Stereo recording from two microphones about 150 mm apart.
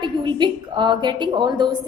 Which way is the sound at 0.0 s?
30° right (ahead or behind).